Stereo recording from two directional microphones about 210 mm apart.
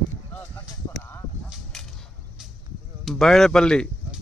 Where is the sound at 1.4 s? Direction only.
Centre (ahead or behind).